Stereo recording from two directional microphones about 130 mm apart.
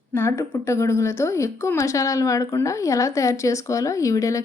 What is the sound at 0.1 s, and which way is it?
A woman's voice, 20° left (ahead or behind).